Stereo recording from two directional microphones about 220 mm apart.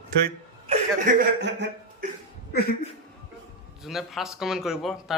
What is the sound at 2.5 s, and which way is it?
Speech, 45° left (ahead or behind).